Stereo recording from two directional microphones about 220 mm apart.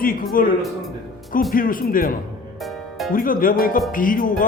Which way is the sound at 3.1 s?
40° left (ahead or behind).